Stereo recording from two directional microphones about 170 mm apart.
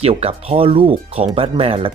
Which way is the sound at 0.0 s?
35° right (ahead or behind).